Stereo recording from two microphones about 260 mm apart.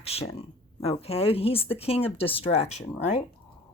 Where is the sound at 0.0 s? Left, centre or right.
Left.